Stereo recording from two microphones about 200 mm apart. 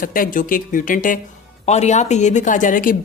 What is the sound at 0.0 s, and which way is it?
A woman's voice, 45° left (ahead or behind).